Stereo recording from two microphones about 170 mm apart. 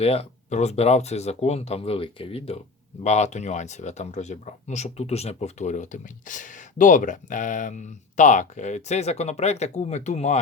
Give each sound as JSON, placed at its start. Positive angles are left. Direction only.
{"t": 0.0, "sound": "speech", "side_deg": 35}